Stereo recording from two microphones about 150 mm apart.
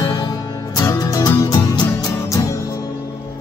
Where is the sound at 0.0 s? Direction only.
25° left (ahead or behind).